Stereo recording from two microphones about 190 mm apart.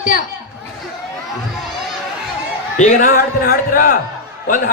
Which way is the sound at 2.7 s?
45° left (ahead or behind).